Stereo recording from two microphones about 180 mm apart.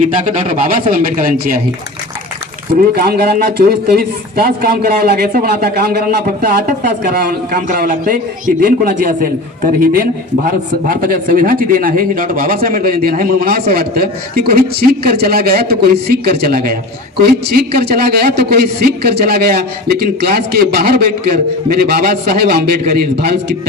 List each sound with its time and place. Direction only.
0.0 s speech: 45° right (ahead or behind)
2.9 s a man's voice: 60° right (ahead or behind)
7.5 s a man's voice: 55° right (ahead or behind)